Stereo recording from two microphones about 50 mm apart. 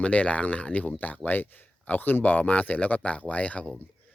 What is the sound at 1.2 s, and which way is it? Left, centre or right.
Speech, left.